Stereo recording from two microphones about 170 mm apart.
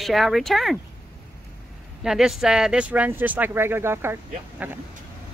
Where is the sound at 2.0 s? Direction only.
5° right (ahead or behind).